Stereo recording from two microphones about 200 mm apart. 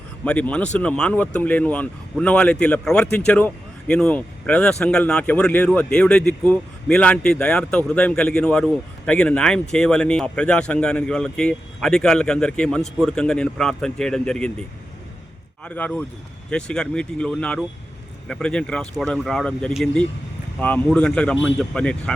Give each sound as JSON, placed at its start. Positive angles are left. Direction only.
{"t": 0.3, "sound": "speech", "side_deg": 5}
{"t": 15.6, "sound": "speech", "side_deg": 5}